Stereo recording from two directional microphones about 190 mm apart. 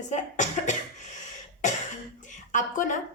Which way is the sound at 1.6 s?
40° left (ahead or behind).